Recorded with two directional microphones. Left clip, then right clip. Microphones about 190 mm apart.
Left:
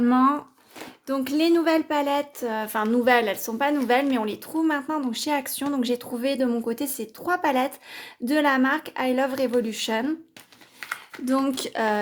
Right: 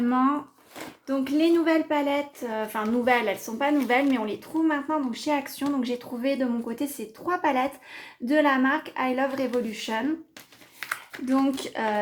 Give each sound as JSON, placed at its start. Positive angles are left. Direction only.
{"t": 0.0, "sound": "speech", "side_deg": 45}
{"t": 11.3, "sound": "speech", "side_deg": 45}